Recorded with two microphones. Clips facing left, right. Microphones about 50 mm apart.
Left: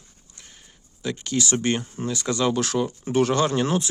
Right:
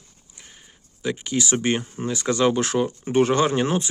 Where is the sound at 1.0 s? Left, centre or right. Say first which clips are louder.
Right 1 dB; centre.